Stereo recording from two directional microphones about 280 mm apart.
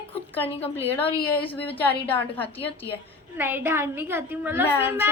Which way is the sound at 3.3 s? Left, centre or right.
Centre.